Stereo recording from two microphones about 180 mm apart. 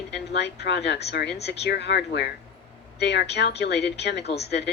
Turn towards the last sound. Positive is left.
turn(degrees=70)  # may be behind; listen again after turning